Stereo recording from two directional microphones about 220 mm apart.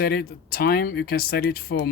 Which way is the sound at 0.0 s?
45° left (ahead or behind).